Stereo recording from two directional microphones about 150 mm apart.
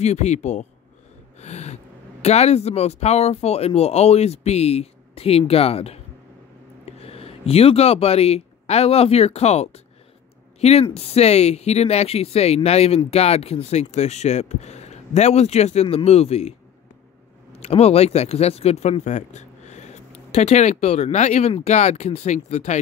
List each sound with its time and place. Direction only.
0.0 s speech: 50° left (ahead or behind)
1.4 s gasp: 45° left (ahead or behind)
2.2 s speech: 45° left (ahead or behind)